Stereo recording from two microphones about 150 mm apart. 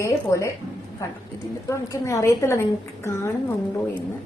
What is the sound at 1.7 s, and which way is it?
A woman's voice, 20° left (ahead or behind).